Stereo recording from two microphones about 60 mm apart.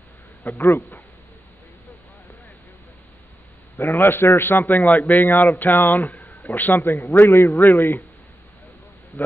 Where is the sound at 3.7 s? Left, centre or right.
Left.